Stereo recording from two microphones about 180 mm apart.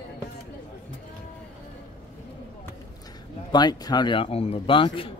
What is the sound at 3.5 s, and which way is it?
A man's voice, 20° left (ahead or behind).